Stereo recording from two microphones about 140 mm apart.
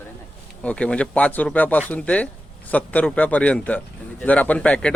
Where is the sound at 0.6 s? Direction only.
10° left (ahead or behind).